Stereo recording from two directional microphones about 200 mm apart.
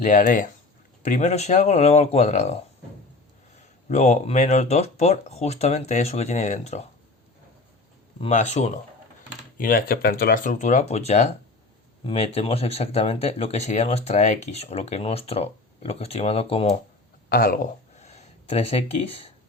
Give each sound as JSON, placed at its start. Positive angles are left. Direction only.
{"t": 0.0, "sound": "speech", "side_deg": 40}
{"t": 3.8, "sound": "speech", "side_deg": 35}
{"t": 8.2, "sound": "speech", "side_deg": 35}
{"t": 17.2, "sound": "speech", "side_deg": 50}
{"t": 17.9, "sound": "a sound", "side_deg": 35}